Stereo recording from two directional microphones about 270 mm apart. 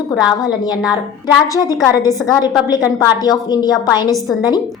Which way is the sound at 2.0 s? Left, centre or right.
Centre.